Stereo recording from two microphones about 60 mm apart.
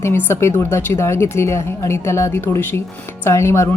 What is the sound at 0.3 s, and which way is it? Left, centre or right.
Speech, left.